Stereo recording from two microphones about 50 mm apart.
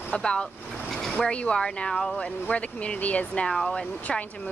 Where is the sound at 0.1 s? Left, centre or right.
Centre.